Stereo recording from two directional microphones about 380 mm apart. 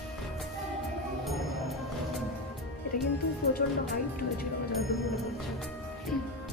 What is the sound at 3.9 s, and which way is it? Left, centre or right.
Speech, left.